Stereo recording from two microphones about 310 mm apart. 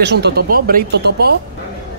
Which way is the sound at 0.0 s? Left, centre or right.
Right.